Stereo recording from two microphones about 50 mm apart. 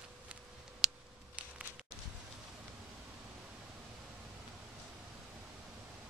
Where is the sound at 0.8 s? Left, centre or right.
Centre.